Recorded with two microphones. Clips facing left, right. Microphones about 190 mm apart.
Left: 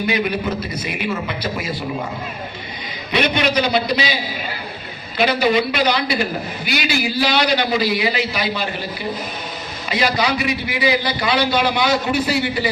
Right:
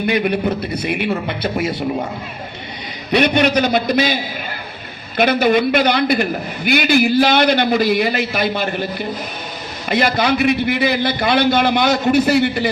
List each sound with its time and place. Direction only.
0.0 s a man's voice: 55° right (ahead or behind)
3.3 s a man's voice: 45° right (ahead or behind)